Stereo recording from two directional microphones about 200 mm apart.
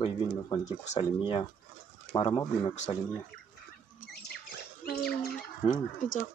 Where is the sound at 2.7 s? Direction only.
35° left (ahead or behind).